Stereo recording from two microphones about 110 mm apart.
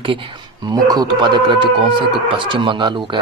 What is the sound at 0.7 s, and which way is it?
Speech, 35° right (ahead or behind).